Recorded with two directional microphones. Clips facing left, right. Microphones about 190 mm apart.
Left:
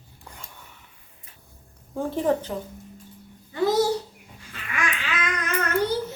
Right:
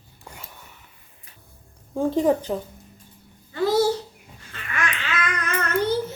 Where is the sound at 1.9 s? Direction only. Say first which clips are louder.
Right 4 dB; 15° right (ahead or behind).